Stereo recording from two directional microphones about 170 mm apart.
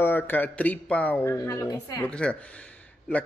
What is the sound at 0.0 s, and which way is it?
A man's voice, 10° left (ahead or behind).